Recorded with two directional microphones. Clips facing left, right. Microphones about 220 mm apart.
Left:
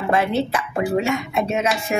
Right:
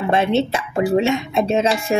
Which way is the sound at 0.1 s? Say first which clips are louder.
Right 2 dB; 25° right (ahead or behind).